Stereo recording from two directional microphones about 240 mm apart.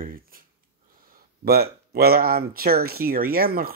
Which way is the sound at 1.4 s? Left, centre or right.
Right.